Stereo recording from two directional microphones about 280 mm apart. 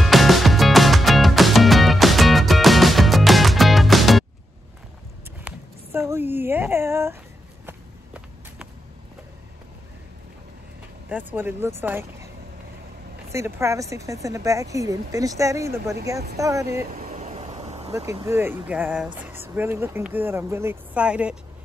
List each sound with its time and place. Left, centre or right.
0.0 s music: centre
5.4 s a sound: centre
7.6 s walk: centre
11.1 s speech: centre
13.3 s speech: centre
16.9 s vehicle: right
17.9 s speech: centre